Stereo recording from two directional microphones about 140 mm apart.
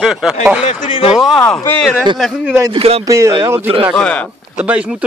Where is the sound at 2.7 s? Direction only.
45° right (ahead or behind).